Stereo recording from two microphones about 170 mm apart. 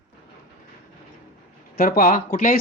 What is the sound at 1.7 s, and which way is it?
Speech, 55° left (ahead or behind).